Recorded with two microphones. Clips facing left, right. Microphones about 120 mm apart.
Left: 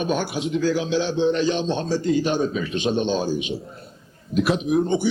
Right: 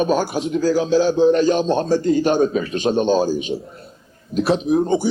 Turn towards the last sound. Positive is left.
turn(degrees=-40)  # may be behind; listen again after turning